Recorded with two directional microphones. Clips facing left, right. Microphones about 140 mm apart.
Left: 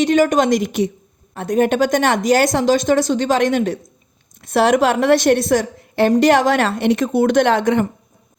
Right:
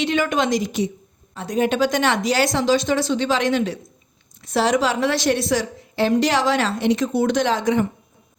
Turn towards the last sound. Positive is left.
turn(degrees=60)  # may be behind; listen again after turning